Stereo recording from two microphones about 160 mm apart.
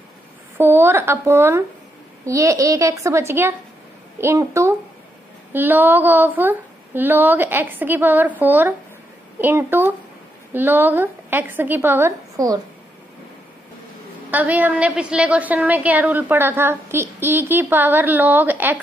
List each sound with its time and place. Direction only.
0.6 s a woman's voice: 15° right (ahead or behind)
14.3 s a woman's voice: 10° right (ahead or behind)